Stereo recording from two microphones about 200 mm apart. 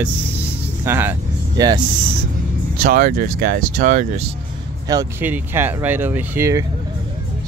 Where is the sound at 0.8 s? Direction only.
10° right (ahead or behind).